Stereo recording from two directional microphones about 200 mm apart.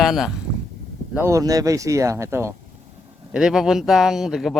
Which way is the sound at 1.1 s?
15° right (ahead or behind).